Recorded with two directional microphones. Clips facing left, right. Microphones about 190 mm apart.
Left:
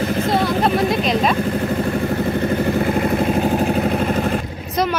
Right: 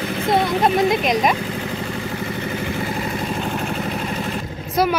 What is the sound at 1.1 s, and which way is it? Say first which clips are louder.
Speech: left 1 dB; 15° right (ahead or behind).